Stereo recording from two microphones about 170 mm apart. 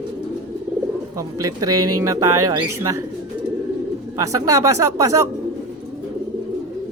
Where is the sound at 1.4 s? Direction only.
20° right (ahead or behind).